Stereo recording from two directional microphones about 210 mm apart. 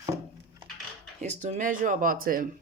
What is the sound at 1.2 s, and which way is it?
Speech, 35° right (ahead or behind).